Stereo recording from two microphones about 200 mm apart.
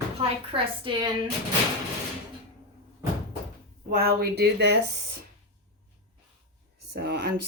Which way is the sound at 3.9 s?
50° right (ahead or behind).